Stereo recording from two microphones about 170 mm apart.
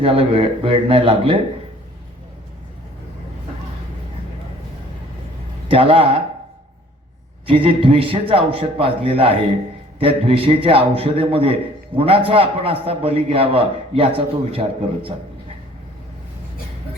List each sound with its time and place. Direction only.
0.0 s a man's voice: 35° right (ahead or behind)
5.6 s a man's voice: 30° right (ahead or behind)
7.4 s a man's voice: 30° right (ahead or behind)